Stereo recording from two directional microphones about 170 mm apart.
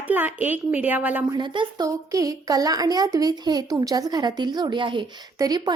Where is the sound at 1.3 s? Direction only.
25° right (ahead or behind).